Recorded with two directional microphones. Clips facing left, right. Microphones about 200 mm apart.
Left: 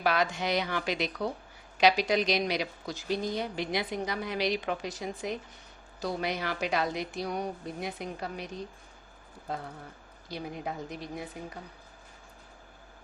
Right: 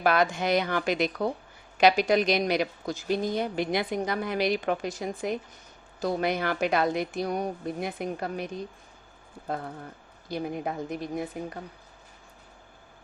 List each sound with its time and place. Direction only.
0.0 s a woman's voice: 50° right (ahead or behind)
10.2 s a woman's voice: 55° right (ahead or behind)